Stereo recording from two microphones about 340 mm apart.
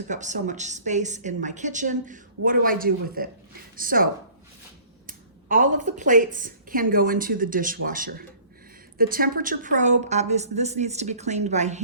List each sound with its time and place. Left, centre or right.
0.1 s a woman's voice: right